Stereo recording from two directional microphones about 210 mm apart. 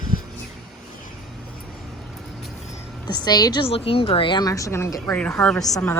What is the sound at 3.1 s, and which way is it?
A woman's voice, 20° left (ahead or behind).